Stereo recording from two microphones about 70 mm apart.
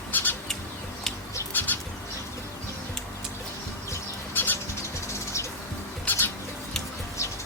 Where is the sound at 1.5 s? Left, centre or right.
Left.